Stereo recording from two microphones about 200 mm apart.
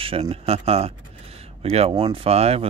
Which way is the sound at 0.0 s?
30° right (ahead or behind).